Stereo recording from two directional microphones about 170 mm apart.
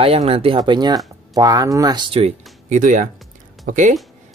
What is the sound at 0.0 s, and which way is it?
Speech, 35° right (ahead or behind).